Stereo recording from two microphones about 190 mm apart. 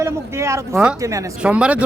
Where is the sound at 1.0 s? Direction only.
15° right (ahead or behind).